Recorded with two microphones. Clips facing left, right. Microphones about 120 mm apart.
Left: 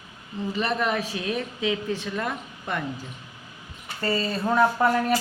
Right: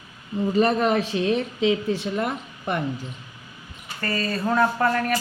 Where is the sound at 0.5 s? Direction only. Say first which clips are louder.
Right 6 dB; 40° right (ahead or behind); by 2.8 s 20° right (ahead or behind).